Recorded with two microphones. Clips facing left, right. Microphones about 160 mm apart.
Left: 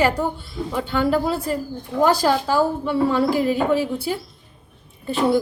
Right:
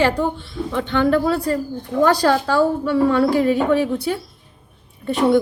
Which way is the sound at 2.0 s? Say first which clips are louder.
Right 1 dB; 10° left (ahead or behind).